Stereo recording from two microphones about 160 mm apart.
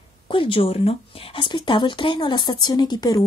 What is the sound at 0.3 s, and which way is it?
Speech, 30° left (ahead or behind).